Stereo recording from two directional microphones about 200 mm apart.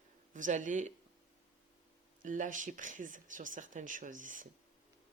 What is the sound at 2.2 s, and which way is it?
Speech, 40° right (ahead or behind).